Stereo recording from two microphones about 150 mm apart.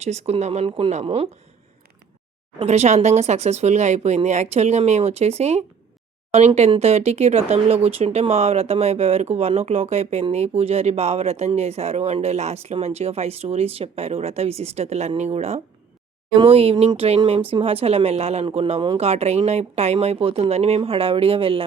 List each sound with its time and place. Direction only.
0.0 s speech: 45° right (ahead or behind)
2.6 s speech: 45° right (ahead or behind)